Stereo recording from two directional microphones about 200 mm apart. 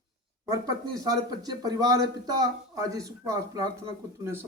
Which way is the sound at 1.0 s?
20° right (ahead or behind).